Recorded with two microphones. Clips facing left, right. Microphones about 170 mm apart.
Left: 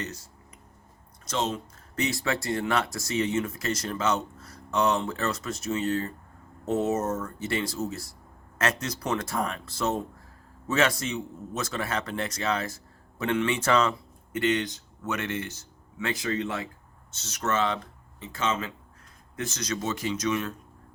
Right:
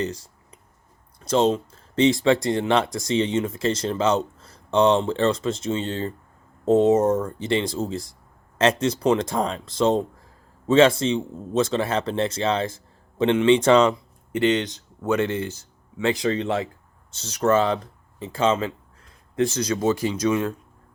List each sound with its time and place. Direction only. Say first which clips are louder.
1.2 s speech: right 10 dB; 30° right (ahead or behind)